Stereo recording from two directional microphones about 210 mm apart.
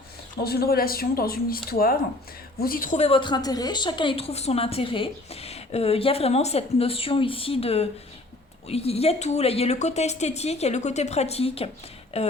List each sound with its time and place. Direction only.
0.3 s a woman's voice: 45° left (ahead or behind); by 12.3 s 30° left (ahead or behind)